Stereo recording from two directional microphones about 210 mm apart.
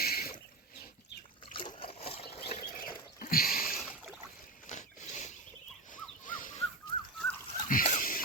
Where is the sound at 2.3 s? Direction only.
30° left (ahead or behind).